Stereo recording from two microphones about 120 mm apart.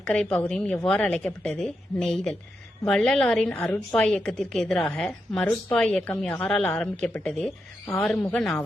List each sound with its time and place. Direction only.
0.0 s a woman's voice: 10° left (ahead or behind)
3.5 s a woman's voice: 15° left (ahead or behind)
3.9 s a woman's voice: 5° left (ahead or behind)